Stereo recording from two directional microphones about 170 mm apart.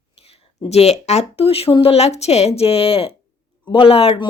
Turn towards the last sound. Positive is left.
turn(degrees=35)  # may be behind; listen again after turning